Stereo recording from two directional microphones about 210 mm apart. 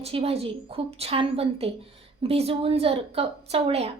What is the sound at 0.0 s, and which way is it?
A woman's voice, 25° right (ahead or behind).